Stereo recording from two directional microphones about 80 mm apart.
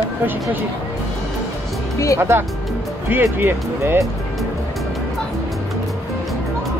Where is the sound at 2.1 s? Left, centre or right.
Right.